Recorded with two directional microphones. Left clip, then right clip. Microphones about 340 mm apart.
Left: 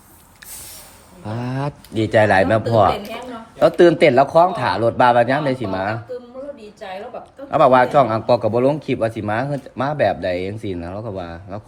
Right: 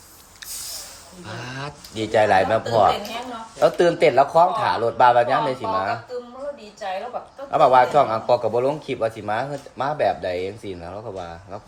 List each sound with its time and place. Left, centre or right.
1.2 s speech: centre
7.5 s speech: left